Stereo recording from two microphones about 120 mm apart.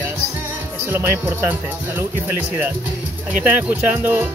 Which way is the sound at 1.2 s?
20° right (ahead or behind).